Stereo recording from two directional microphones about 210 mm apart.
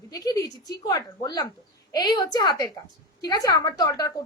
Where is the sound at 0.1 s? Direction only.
15° left (ahead or behind).